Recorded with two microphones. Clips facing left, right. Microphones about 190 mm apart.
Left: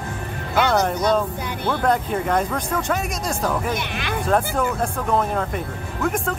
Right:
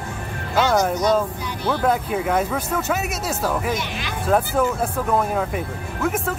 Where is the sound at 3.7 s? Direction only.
60° left (ahead or behind).